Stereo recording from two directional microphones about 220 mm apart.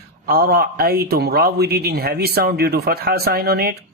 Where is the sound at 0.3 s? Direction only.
45° right (ahead or behind).